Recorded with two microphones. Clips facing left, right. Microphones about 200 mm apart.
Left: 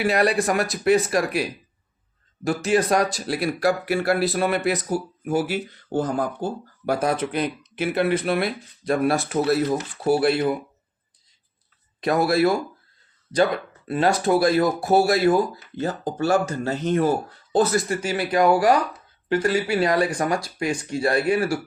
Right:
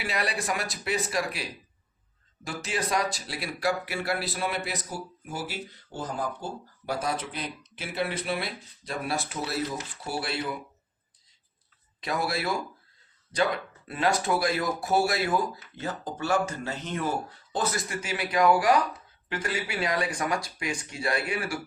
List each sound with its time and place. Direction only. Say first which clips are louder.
0.0 s speech: left 11 dB; 50° left (ahead or behind)
11.9 s speech: left 10 dB; 50° left (ahead or behind)
13.3 s speech: left 6 dB; 35° left (ahead or behind)